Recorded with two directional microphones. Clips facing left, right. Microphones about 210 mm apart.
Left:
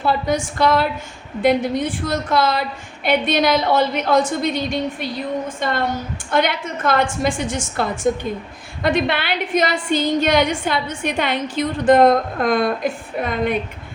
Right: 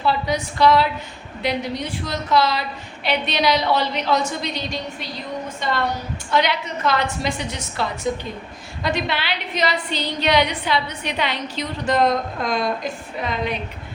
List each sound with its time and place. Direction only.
0.0 s a woman's voice: 50° left (ahead or behind)